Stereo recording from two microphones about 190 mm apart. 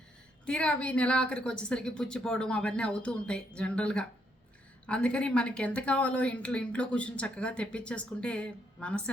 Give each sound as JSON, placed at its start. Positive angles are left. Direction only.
{"t": 0.4, "sound": "a woman's voice", "side_deg": 5}